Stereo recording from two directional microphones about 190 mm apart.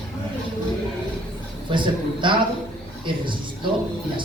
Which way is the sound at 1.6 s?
25° right (ahead or behind).